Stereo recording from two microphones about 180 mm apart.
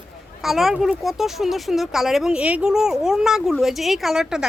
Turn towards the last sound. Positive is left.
turn(degrees=-5)  # may be behind; listen again after turning